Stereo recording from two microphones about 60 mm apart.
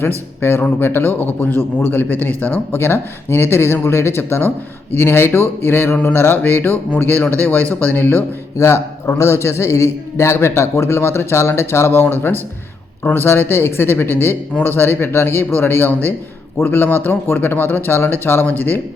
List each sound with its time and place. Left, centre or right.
0.0 s a man's voice: left
8.5 s a man's voice: left